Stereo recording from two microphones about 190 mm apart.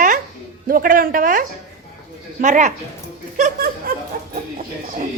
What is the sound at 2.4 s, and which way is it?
A woman's voice, 40° right (ahead or behind).